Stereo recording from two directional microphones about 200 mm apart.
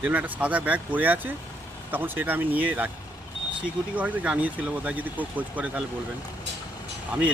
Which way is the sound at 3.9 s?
5° right (ahead or behind).